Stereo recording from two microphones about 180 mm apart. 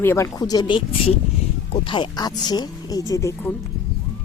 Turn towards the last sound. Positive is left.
turn(degrees=15)  # may be behind; listen again after turning